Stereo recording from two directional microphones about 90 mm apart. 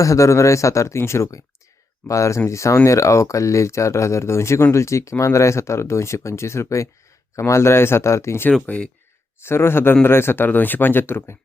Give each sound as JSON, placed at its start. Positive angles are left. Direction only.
{"t": 0.0, "sound": "speech", "side_deg": 35}
{"t": 8.6, "sound": "speech", "side_deg": 15}
{"t": 9.4, "sound": "speech", "side_deg": 25}